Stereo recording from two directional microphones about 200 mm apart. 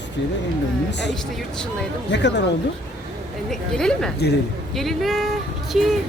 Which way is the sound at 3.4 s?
5° left (ahead or behind).